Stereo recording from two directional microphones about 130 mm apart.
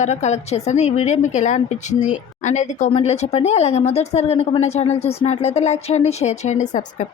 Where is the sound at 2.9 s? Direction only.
55° left (ahead or behind).